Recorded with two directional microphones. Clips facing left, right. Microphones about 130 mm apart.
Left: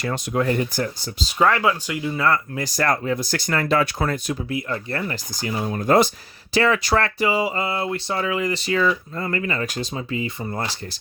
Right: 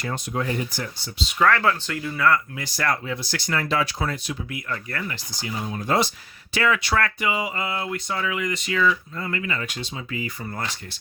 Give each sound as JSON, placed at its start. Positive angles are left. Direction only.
{"t": 0.0, "sound": "speech", "side_deg": 85}
{"t": 0.4, "sound": "speech", "side_deg": 55}
{"t": 1.4, "sound": "speech", "side_deg": 15}
{"t": 2.6, "sound": "speech", "side_deg": 40}
{"t": 4.4, "sound": "speech", "side_deg": 30}
{"t": 6.5, "sound": "speech", "side_deg": 35}
{"t": 10.1, "sound": "speech", "side_deg": 25}